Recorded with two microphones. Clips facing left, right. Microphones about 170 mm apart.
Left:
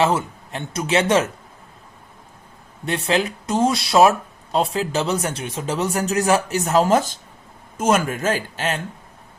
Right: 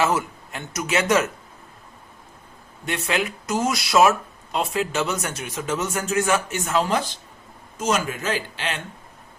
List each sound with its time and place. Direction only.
0.0 s speech: 30° left (ahead or behind)
2.8 s a man's voice: 30° left (ahead or behind)